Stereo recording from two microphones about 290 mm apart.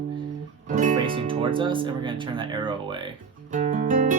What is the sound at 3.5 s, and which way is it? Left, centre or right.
Music, right.